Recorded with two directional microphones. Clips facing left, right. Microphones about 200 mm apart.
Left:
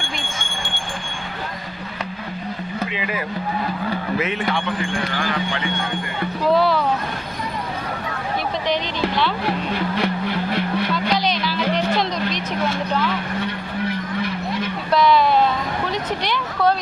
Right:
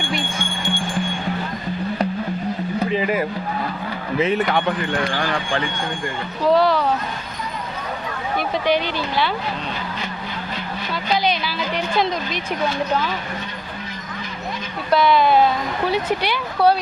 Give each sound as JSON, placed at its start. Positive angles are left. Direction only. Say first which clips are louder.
{"t": 2.9, "sound": "a sound", "louder": "right 6 dB", "side_deg": -45}
{"t": 4.2, "sound": "speech", "louder": "right 4 dB", "side_deg": -40}
{"t": 8.6, "sound": "speech", "louder": "right 2 dB", "side_deg": -5}
{"t": 10.0, "sound": "vehicle", "louder": "left 8 dB", "side_deg": 70}
{"t": 13.4, "sound": "vehicle", "louder": "left 7 dB", "side_deg": 65}
{"t": 14.9, "sound": "speech", "louder": "right 1 dB", "side_deg": 0}